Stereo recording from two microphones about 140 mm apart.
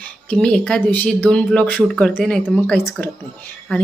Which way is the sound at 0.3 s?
5° left (ahead or behind).